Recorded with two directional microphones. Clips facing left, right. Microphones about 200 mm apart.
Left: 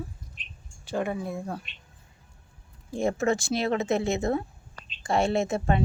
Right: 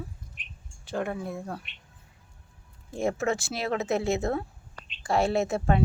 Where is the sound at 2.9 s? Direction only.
5° right (ahead or behind).